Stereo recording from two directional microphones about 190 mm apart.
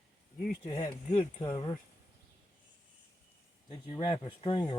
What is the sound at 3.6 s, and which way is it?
Speech, 20° left (ahead or behind).